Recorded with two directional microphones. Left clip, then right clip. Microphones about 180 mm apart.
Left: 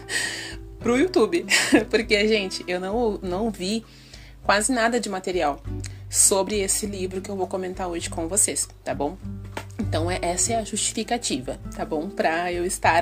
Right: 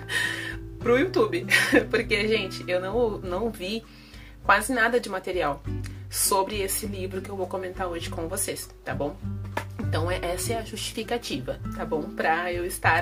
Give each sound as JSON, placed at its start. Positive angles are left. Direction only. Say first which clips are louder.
{"t": 0.1, "sound": "speech", "louder": "even", "side_deg": 35}